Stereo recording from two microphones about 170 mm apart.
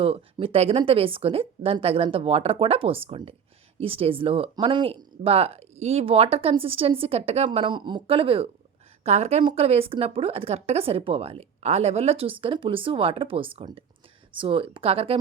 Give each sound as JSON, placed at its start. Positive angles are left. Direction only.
{"t": 0.0, "sound": "a woman's voice", "side_deg": -35}